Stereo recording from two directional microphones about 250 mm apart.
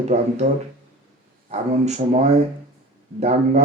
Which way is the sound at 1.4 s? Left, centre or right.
Right.